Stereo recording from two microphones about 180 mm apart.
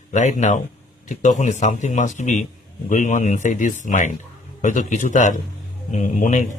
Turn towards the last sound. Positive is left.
turn(degrees=45)  # may be behind; listen again after turning